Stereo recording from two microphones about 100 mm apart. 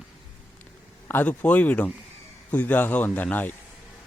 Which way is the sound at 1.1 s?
15° left (ahead or behind).